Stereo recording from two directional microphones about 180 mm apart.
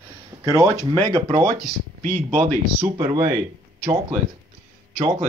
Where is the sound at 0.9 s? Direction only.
25° right (ahead or behind).